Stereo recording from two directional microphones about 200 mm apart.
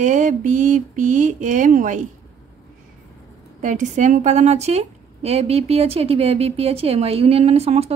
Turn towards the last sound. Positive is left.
turn(degrees=-30)  # may be behind; listen again after turning